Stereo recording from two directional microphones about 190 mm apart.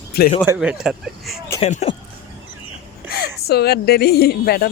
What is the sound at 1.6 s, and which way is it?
Speech, 35° left (ahead or behind).